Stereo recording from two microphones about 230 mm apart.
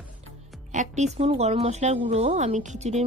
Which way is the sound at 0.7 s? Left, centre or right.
Right.